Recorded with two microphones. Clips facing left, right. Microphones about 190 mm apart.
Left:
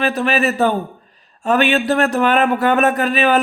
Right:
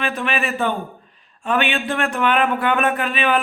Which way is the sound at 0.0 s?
40° left (ahead or behind).